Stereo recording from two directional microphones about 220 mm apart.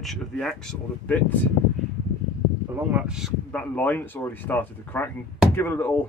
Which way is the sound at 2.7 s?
5° right (ahead or behind).